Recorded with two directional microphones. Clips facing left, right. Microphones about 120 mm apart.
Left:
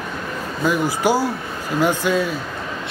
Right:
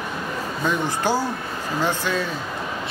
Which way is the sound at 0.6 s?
10° left (ahead or behind).